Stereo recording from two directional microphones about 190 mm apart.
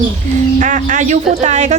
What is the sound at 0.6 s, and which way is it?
Speech, 40° right (ahead or behind).